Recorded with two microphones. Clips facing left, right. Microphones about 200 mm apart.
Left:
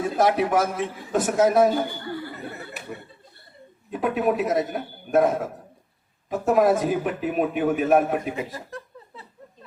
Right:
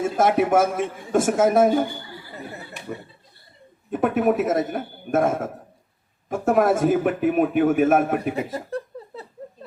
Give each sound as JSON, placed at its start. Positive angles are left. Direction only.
{"t": 0.0, "sound": "a man's voice", "side_deg": -50}
{"t": 2.0, "sound": "chatter", "side_deg": 60}
{"t": 4.0, "sound": "a man's voice", "side_deg": -50}
{"t": 8.4, "sound": "laughter", "side_deg": -30}